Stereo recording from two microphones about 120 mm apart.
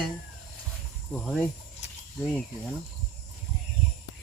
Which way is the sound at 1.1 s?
5° left (ahead or behind).